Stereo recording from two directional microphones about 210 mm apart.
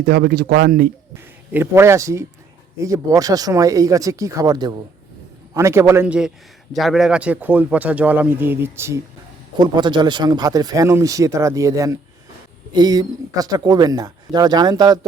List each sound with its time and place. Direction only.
0.0 s speech: 50° right (ahead or behind)
1.5 s speech: 10° right (ahead or behind)